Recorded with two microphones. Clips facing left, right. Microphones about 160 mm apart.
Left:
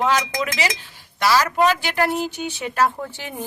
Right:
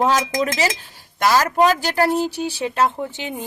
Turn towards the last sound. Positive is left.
turn(degrees=-20)  # may be behind; listen again after turning